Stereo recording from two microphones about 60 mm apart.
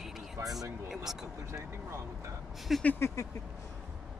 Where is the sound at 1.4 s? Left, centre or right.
Right.